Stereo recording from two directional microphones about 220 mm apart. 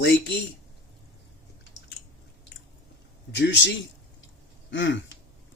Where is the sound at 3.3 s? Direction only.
50° left (ahead or behind).